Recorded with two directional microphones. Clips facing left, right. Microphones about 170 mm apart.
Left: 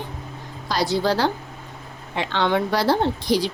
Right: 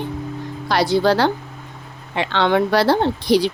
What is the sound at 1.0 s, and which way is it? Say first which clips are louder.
Speech: right 4 dB; 70° right (ahead or behind).